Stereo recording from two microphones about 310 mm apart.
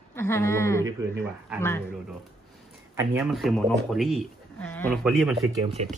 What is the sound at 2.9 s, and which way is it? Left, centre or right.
Speech, centre.